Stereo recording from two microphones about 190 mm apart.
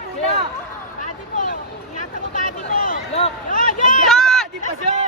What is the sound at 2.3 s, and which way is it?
Speech, 45° left (ahead or behind).